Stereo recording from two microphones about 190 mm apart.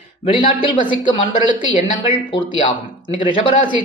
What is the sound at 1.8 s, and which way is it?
Speech, 30° left (ahead or behind).